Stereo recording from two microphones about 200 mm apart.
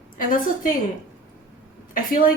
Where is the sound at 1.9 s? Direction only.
45° left (ahead or behind).